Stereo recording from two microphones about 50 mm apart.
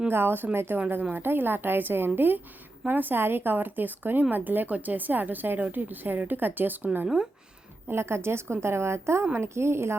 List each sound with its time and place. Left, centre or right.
0.1 s a woman's voice: right
7.9 s a woman's voice: right